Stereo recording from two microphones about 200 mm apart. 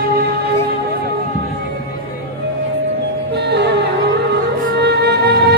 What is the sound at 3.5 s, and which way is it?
Music, 60° right (ahead or behind).